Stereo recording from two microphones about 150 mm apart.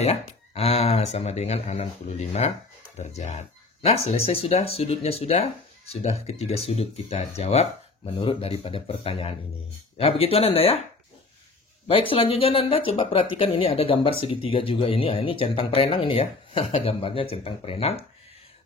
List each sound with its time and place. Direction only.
0.0 s speech: 45° left (ahead or behind)
11.9 s speech: 40° left (ahead or behind)